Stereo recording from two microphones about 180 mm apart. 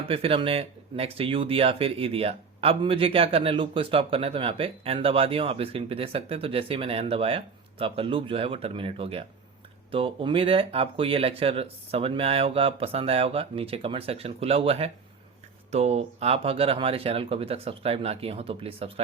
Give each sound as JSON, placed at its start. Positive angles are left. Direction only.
{"t": 0.0, "sound": "speech", "side_deg": -30}